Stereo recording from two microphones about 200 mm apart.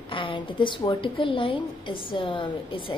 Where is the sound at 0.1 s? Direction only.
25° left (ahead or behind).